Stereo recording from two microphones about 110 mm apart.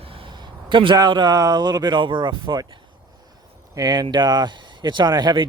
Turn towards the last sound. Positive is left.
turn(degrees=-40)  # may be behind; listen again after turning